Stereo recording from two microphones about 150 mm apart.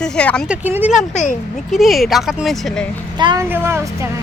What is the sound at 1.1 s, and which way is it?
Speech, 55° left (ahead or behind).